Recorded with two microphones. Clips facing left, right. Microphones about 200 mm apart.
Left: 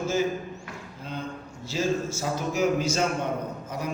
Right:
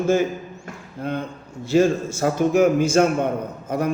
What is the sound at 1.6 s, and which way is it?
A man's voice, 55° right (ahead or behind).